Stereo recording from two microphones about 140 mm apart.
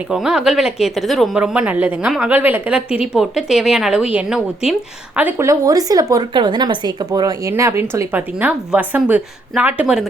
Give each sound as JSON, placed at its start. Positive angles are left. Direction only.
{"t": 0.1, "sound": "speech", "side_deg": -5}
{"t": 5.1, "sound": "a woman's voice", "side_deg": -15}